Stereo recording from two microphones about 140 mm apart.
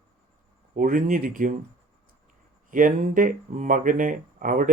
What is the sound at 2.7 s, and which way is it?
Speech, 75° right (ahead or behind).